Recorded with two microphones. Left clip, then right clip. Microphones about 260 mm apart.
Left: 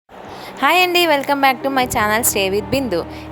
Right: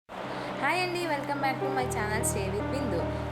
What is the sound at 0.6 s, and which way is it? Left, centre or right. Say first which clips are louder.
A woman's voice: left 16 dB; left.